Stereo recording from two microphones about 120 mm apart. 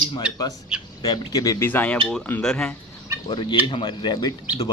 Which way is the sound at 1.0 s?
30° left (ahead or behind).